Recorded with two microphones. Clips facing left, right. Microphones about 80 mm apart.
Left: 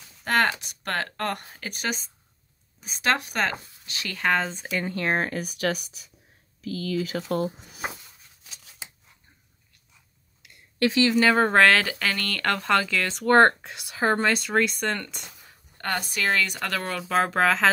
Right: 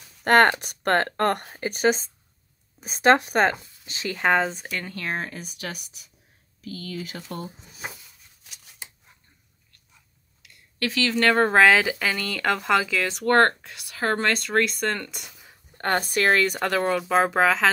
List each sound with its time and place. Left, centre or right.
0.2 s speech: right
1.6 s speech: right; by 4.5 s centre
4.6 s speech: centre
4.9 s speech: left
7.2 s speech: left
10.4 s a sound: left
11.1 s speech: centre
13.3 s speech: centre
14.1 s speech: centre
15.8 s speech: right
16.6 s speech: right
17.1 s speech: centre